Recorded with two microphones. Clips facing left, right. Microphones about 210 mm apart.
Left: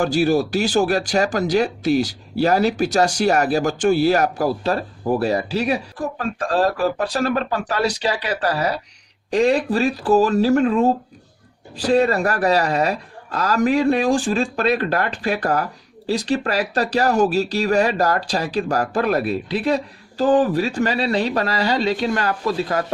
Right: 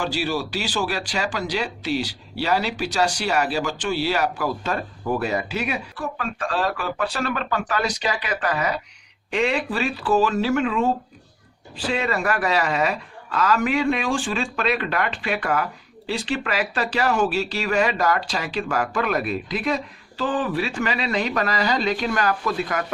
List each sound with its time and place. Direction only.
0.0 s speech: 45° left (ahead or behind)